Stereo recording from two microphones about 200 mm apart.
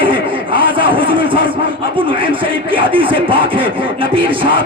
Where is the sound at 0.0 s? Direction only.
25° right (ahead or behind).